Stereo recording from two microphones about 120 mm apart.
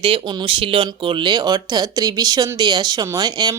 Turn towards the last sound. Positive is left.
turn(degrees=-35)  # may be behind; listen again after turning